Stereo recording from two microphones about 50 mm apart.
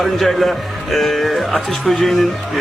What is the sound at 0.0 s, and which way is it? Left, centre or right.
Speech, centre.